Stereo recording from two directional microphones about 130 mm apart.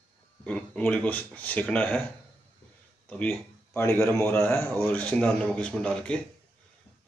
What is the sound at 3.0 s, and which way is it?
A man's voice, 15° left (ahead or behind).